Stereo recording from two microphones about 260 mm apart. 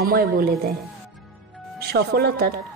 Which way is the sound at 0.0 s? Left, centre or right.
Right.